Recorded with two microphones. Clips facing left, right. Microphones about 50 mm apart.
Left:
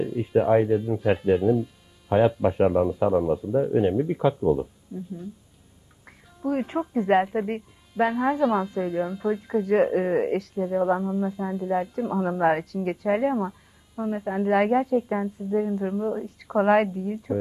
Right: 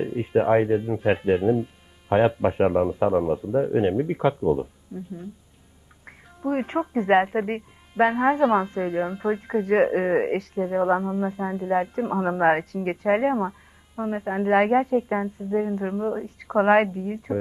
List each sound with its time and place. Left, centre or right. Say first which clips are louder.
0.0 s speech: even; right